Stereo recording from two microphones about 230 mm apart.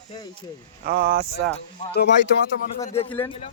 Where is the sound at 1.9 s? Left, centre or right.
Left.